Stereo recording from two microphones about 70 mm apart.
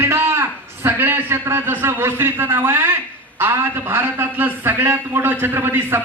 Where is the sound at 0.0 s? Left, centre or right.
Right.